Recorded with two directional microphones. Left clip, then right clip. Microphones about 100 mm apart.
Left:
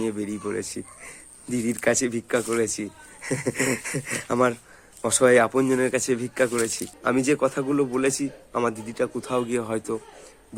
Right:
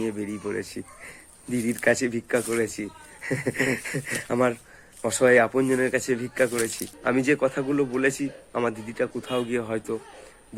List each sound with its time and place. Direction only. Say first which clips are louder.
0.0 s speech: left 1 dB; 20° left (ahead or behind)